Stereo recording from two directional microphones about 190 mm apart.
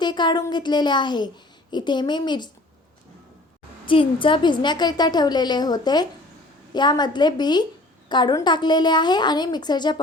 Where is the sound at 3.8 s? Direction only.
25° left (ahead or behind).